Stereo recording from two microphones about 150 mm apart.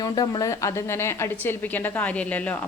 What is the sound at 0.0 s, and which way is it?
A woman's voice, 25° left (ahead or behind).